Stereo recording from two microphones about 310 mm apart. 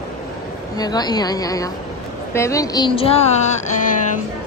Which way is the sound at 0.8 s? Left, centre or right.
Centre.